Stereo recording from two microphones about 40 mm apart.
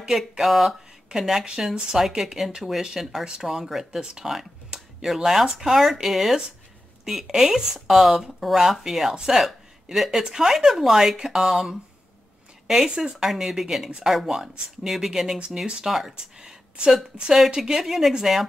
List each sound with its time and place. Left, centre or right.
0.4 s speech: centre
12.8 s speech: centre
15.3 s speech: right
15.9 s speech: centre
16.3 s a sound: centre
16.9 s speech: centre